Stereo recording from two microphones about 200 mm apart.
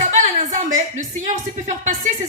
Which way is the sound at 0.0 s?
40° right (ahead or behind).